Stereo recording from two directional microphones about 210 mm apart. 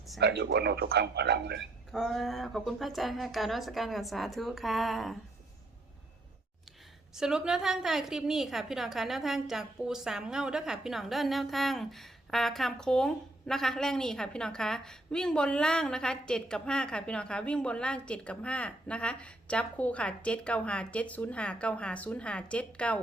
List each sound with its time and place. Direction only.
0.2 s speech: 50° right (ahead or behind)
1.9 s a woman's voice: centre (ahead or behind)
7.1 s a woman's voice: 5° right (ahead or behind)